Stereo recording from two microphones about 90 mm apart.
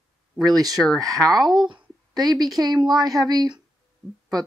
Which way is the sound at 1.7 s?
50° right (ahead or behind).